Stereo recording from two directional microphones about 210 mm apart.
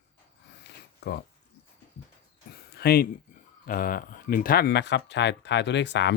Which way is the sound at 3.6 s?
40° left (ahead or behind).